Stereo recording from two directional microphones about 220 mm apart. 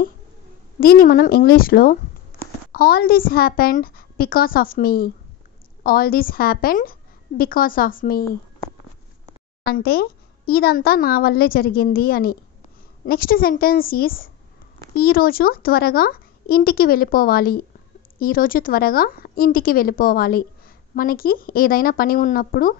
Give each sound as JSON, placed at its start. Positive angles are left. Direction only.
{"t": 0.7, "sound": "a woman's voice", "side_deg": 40}
{"t": 9.8, "sound": "a woman's voice", "side_deg": 45}